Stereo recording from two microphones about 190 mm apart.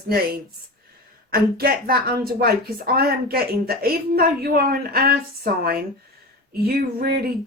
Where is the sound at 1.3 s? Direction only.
55° right (ahead or behind).